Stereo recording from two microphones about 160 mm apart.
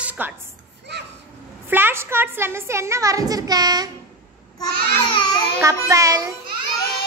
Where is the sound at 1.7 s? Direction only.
15° right (ahead or behind).